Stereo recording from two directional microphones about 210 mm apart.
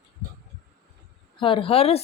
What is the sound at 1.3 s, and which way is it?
Speech, 25° left (ahead or behind).